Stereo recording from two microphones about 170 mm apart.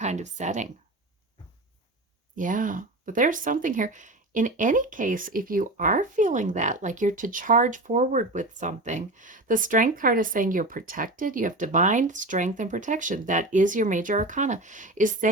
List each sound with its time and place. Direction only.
0.0 s speech: 45° right (ahead or behind)
2.3 s speech: 50° right (ahead or behind)